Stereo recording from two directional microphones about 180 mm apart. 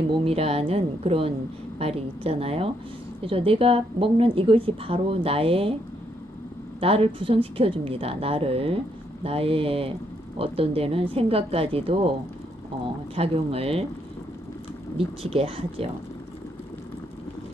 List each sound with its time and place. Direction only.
0.2 s a woman's voice: 35° right (ahead or behind)
6.8 s a woman's voice: 30° right (ahead or behind)
13.1 s a woman's voice: 30° right (ahead or behind)
15.0 s a woman's voice: 30° right (ahead or behind)